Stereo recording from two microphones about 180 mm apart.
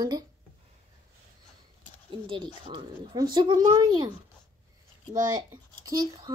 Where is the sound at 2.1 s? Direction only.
30° right (ahead or behind).